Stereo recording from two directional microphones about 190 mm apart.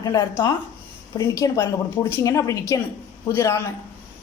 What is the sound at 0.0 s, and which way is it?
A woman's voice, 20° left (ahead or behind).